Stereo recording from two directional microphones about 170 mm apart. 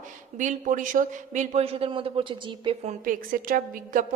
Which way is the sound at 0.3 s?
50° right (ahead or behind).